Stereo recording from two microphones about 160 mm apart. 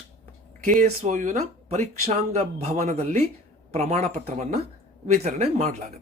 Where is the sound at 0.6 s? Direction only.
50° right (ahead or behind).